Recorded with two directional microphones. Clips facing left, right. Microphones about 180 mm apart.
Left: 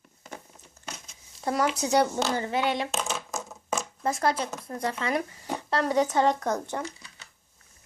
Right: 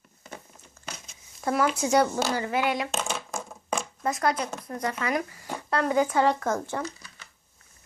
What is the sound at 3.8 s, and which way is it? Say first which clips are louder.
A child's voice: even; 30° left (ahead or behind).